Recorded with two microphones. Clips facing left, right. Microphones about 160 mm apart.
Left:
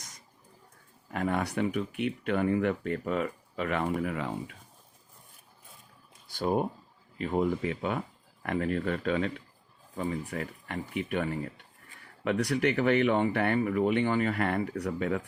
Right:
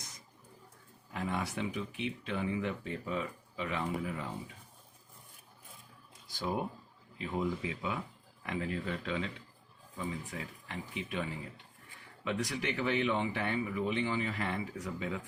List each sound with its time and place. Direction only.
1.1 s speech: 65° left (ahead or behind)
6.2 s speech: 60° left (ahead or behind)